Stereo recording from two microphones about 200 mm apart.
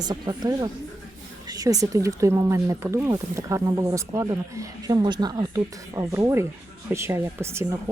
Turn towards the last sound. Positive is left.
turn(degrees=-15)  # may be behind; listen again after turning